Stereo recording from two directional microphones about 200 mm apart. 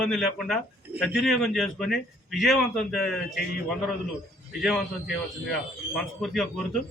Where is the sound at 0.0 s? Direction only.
Centre (ahead or behind).